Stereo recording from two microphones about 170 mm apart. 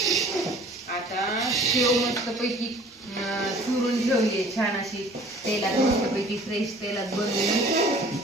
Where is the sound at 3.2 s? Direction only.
Centre (ahead or behind).